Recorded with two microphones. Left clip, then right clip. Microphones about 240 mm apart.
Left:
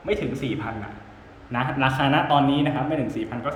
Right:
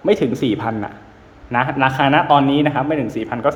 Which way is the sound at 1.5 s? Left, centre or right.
Centre.